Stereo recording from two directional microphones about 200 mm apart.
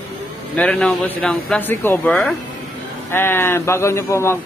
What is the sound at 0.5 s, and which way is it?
A man's voice, 5° left (ahead or behind).